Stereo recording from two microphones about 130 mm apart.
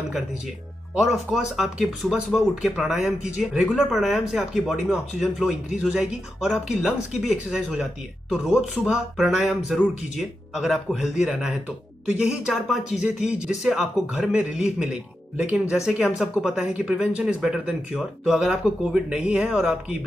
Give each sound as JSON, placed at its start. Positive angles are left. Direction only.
{"t": 0.9, "sound": "speech", "side_deg": -5}